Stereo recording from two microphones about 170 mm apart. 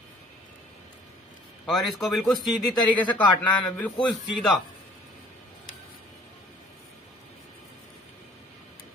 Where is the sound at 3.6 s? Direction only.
10° left (ahead or behind).